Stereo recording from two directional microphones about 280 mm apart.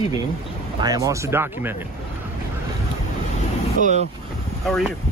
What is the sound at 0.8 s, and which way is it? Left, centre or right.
Speech, centre.